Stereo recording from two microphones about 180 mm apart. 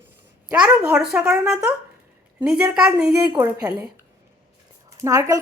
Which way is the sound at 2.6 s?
10° right (ahead or behind).